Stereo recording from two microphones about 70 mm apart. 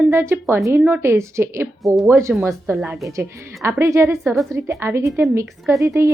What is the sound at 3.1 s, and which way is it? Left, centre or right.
A woman's voice, right.